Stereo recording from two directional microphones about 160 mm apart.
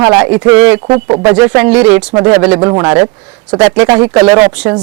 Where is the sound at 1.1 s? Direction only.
25° right (ahead or behind).